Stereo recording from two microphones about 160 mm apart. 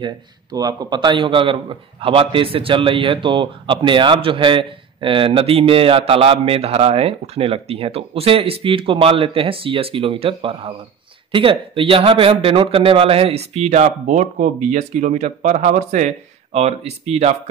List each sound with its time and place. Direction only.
0.0 s a man's voice: 25° right (ahead or behind); by 17.4 s 40° right (ahead or behind)